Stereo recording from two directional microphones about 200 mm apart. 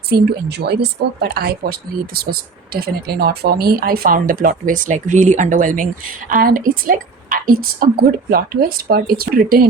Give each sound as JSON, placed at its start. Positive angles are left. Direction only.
{"t": 0.1, "sound": "speech", "side_deg": -55}